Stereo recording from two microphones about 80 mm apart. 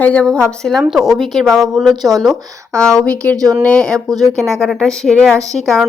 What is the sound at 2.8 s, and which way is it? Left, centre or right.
A woman's voice, centre.